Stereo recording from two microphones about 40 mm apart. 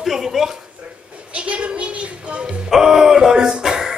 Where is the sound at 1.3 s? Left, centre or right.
Right.